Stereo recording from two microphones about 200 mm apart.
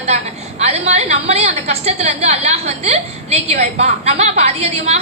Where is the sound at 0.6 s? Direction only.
35° right (ahead or behind).